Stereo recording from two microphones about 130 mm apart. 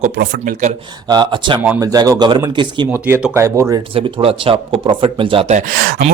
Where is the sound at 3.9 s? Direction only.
40° right (ahead or behind).